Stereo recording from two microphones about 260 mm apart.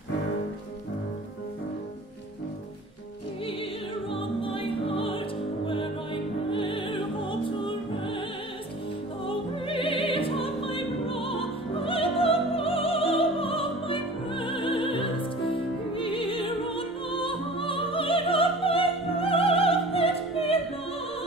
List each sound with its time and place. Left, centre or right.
4.1 s music: left
6.5 s music: centre
9.2 s music: centre